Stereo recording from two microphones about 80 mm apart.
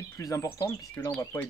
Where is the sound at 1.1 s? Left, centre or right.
Left.